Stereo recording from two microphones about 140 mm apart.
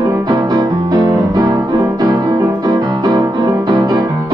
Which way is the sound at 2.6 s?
30° right (ahead or behind).